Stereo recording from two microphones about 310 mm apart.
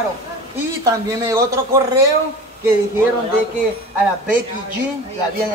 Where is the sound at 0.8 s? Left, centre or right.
Centre.